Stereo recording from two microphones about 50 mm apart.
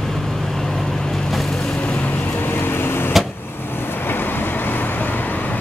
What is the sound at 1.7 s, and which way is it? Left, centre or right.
Vehicle, left.